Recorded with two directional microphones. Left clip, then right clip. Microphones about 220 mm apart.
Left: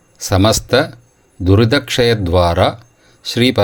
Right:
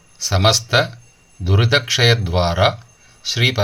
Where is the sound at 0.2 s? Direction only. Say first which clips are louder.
Left 2 dB; 35° left (ahead or behind).